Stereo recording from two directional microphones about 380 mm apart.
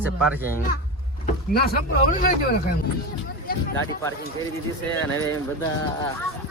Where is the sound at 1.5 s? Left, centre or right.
Left.